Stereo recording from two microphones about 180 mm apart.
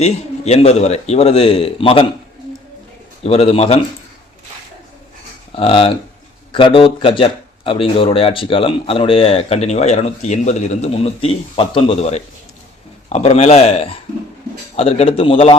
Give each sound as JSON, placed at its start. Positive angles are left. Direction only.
{"t": 0.0, "sound": "speech", "side_deg": 35}
{"t": 3.2, "sound": "speech", "side_deg": 35}
{"t": 5.5, "sound": "speech", "side_deg": 30}